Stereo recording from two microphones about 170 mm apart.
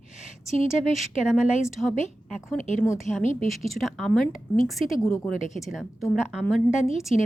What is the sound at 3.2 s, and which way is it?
Speech, 45° left (ahead or behind).